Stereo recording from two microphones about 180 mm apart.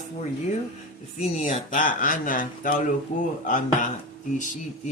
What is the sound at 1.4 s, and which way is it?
Speech, 45° left (ahead or behind).